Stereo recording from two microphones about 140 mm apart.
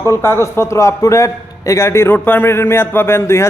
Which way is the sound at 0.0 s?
20° left (ahead or behind).